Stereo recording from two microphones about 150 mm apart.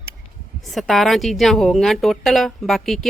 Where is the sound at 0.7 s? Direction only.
Centre (ahead or behind).